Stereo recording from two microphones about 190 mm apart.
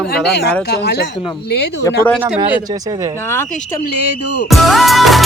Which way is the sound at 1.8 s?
10° left (ahead or behind).